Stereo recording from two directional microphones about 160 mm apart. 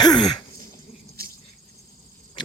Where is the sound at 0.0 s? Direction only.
25° left (ahead or behind).